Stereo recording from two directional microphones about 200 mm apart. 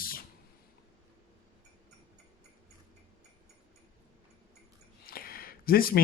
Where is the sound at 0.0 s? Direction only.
45° left (ahead or behind).